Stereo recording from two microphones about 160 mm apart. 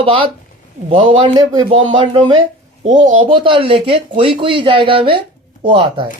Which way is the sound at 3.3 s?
30° right (ahead or behind).